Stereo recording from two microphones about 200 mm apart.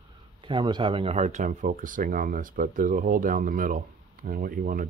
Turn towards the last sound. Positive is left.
turn(degrees=-45)  # may be behind; listen again after turning